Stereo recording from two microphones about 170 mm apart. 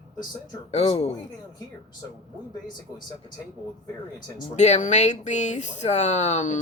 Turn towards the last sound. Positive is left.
turn(degrees=40)  # may be behind; listen again after turning